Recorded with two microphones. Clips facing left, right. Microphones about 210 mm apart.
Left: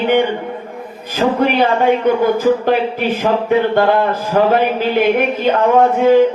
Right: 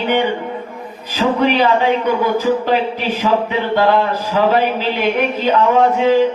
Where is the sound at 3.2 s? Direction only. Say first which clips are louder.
Left 3 dB; 50° left (ahead or behind).